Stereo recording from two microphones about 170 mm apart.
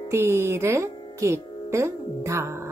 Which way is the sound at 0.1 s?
15° right (ahead or behind).